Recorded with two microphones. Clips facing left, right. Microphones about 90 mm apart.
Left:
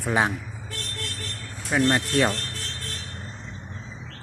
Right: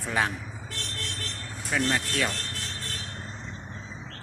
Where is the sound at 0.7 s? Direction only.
Centre (ahead or behind).